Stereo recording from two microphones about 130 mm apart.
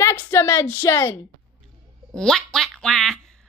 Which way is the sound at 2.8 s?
Centre (ahead or behind).